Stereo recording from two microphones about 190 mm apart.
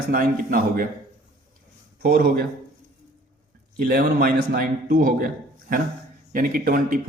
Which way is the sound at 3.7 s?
50° right (ahead or behind).